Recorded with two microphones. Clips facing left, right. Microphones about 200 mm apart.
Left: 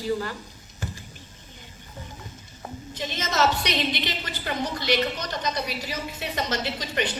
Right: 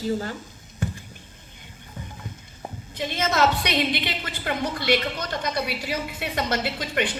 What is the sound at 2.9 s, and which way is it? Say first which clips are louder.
A woman's voice: right 3 dB; 55° right (ahead or behind).